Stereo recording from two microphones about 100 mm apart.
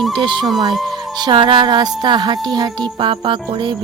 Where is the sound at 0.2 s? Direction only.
50° right (ahead or behind).